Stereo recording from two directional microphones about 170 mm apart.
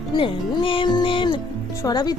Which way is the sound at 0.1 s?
30° left (ahead or behind).